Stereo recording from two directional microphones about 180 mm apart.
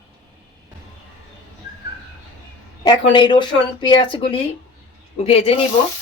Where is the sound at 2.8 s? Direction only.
25° left (ahead or behind).